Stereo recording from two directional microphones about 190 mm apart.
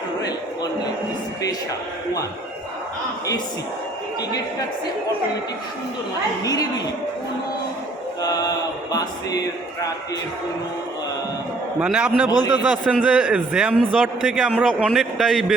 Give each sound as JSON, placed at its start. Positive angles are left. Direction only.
{"t": 6.4, "sound": "a woman's voice", "side_deg": 20}
{"t": 8.2, "sound": "mantra", "side_deg": 20}
{"t": 11.8, "sound": "a man's voice", "side_deg": -5}